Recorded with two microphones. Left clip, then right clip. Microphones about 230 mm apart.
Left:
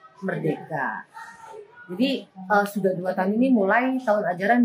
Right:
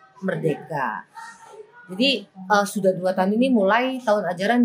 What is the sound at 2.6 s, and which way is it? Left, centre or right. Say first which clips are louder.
Speech: right 3 dB; right.